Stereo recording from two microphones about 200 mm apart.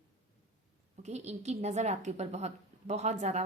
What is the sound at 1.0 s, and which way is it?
A woman's voice, 35° right (ahead or behind).